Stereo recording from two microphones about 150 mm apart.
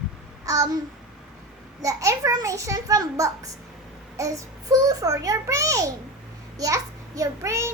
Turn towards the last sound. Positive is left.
turn(degrees=-20)  # may be behind; listen again after turning